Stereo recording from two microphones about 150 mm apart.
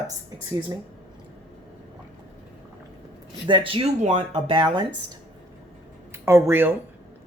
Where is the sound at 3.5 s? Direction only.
35° right (ahead or behind).